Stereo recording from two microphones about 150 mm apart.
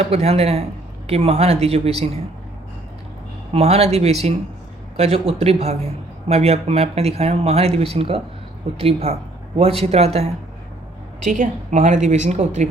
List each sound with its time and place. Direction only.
0.0 s a man's voice: 45° right (ahead or behind)
3.5 s a man's voice: 45° right (ahead or behind)
11.3 s a man's voice: 50° right (ahead or behind)